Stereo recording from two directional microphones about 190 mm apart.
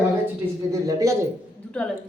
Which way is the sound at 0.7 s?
15° right (ahead or behind).